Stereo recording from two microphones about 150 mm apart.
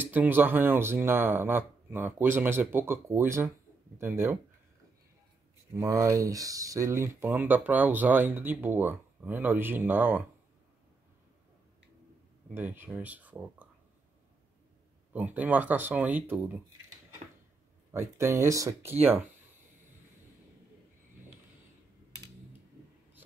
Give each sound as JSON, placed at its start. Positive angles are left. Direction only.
{"t": 0.0, "sound": "speech", "side_deg": -10}
{"t": 5.8, "sound": "speech", "side_deg": -20}
{"t": 12.5, "sound": "speech", "side_deg": -15}
{"t": 15.1, "sound": "speech", "side_deg": -10}
{"t": 17.9, "sound": "speech", "side_deg": -20}